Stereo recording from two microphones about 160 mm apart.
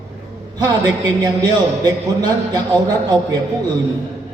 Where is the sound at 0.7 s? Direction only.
25° right (ahead or behind).